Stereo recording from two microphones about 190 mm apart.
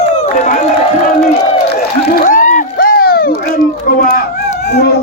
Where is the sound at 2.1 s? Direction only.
45° left (ahead or behind).